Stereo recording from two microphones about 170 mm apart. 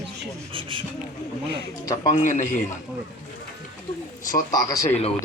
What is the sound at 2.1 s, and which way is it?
Speech, 45° left (ahead or behind).